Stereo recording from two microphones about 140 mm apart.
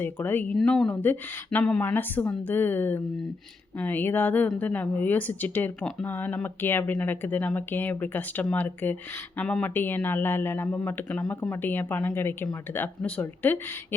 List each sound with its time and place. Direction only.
0.0 s speech: 15° left (ahead or behind)